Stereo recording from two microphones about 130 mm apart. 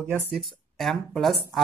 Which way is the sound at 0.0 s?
15° right (ahead or behind).